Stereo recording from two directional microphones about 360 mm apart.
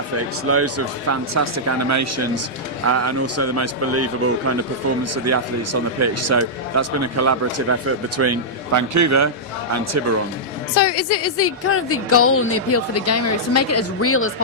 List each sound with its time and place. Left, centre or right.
0.4 s a man's voice: right
10.8 s a woman's voice: left